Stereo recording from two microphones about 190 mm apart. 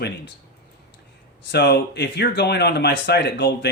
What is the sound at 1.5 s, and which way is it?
Speech, 60° left (ahead or behind).